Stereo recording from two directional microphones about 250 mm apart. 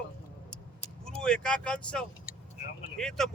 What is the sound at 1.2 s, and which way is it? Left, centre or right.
Speech, centre.